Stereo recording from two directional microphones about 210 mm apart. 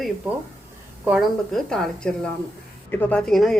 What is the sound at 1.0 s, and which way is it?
A woman's voice, 5° right (ahead or behind).